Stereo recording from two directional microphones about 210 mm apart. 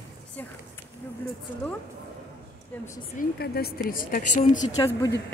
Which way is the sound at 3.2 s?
50° left (ahead or behind).